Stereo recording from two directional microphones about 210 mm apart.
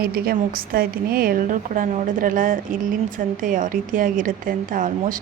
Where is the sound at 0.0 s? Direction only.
45° right (ahead or behind).